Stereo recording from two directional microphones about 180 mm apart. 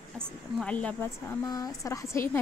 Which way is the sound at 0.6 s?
5° left (ahead or behind).